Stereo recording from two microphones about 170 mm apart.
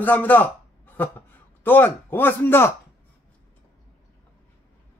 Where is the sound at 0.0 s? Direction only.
10° left (ahead or behind).